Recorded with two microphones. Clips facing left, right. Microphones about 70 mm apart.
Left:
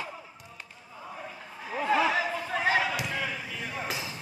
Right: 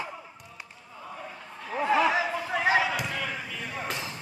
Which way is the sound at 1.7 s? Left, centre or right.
Centre.